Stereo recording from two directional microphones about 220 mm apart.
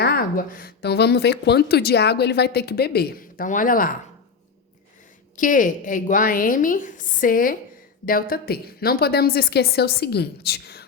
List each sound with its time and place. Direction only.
0.0 s speech: 45° left (ahead or behind)
5.4 s a woman's voice: 35° left (ahead or behind)